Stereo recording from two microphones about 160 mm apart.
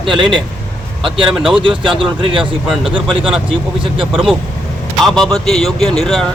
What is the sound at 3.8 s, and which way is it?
Speech, 35° right (ahead or behind).